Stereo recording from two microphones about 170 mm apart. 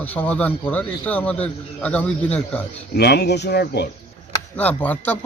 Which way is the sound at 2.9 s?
75° left (ahead or behind).